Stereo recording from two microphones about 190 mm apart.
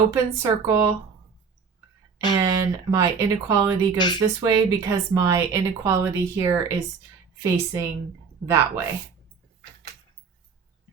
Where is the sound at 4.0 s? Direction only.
25° left (ahead or behind).